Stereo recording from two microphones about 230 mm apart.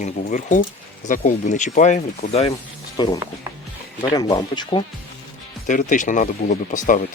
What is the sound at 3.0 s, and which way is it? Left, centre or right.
Speech, centre.